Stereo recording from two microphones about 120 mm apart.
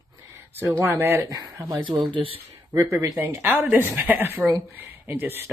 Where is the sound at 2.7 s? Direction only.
25° right (ahead or behind).